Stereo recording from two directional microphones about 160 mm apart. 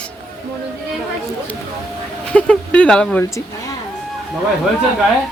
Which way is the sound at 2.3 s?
5° left (ahead or behind).